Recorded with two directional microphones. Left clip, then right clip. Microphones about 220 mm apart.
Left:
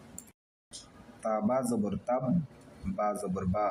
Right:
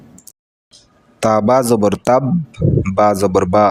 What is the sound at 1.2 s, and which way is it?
Speech, 50° right (ahead or behind).